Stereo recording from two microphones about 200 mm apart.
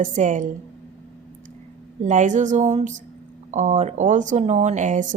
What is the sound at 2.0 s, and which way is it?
Speech, 40° right (ahead or behind).